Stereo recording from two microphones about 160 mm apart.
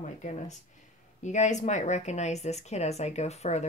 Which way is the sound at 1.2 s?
50° left (ahead or behind).